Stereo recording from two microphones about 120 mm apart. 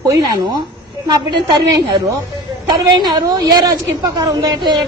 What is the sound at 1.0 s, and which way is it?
A woman's voice, 35° right (ahead or behind).